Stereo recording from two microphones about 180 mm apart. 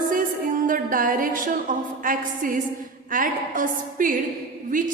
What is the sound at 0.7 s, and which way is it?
Music, 50° right (ahead or behind).